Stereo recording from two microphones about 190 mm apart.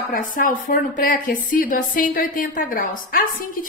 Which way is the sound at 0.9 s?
45° left (ahead or behind).